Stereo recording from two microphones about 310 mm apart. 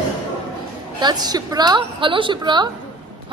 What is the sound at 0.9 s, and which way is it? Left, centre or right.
Speech, centre.